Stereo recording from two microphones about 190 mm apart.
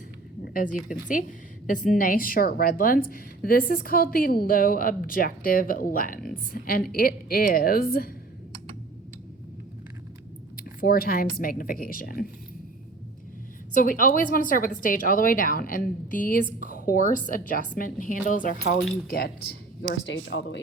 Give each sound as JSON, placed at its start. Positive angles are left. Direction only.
{"t": 0.4, "sound": "a woman's voice", "side_deg": 45}
{"t": 10.8, "sound": "a woman's voice", "side_deg": 50}
{"t": 13.7, "sound": "a woman's voice", "side_deg": 45}
{"t": 19.9, "sound": "speech", "side_deg": 70}